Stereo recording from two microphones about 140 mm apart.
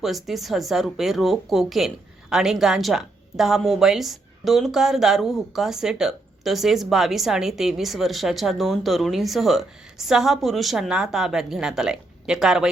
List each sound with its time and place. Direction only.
0.0 s a woman's voice: centre (ahead or behind)